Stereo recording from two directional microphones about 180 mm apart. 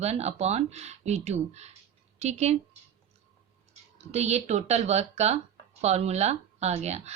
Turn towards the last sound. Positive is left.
turn(degrees=-40)  # may be behind; listen again after turning